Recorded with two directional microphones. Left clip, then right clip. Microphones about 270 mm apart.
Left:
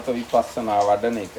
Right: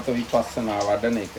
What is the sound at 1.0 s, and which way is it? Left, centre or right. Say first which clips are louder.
Speech: left 1 dB; centre.